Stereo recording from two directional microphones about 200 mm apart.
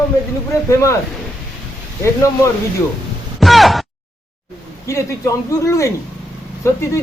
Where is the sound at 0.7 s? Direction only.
15° left (ahead or behind).